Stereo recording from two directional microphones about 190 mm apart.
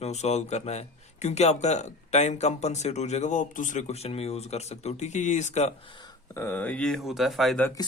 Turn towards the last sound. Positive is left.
turn(degrees=5)  # may be behind; listen again after turning